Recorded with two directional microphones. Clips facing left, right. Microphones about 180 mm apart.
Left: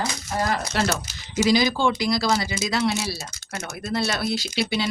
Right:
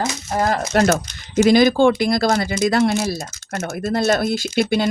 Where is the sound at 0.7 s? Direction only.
50° right (ahead or behind).